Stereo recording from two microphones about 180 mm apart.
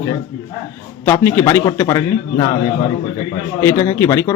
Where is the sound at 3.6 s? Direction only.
15° left (ahead or behind).